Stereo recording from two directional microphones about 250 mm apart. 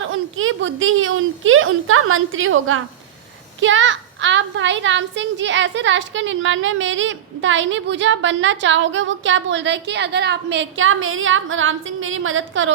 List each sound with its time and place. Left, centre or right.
0.1 s a woman's voice: right